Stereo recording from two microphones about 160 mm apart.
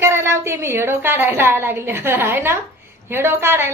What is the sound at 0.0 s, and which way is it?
A woman's voice, 15° right (ahead or behind).